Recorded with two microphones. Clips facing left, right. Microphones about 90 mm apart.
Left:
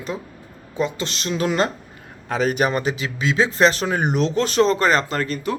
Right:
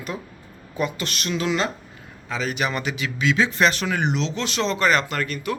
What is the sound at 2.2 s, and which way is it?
A man's voice, 50° left (ahead or behind).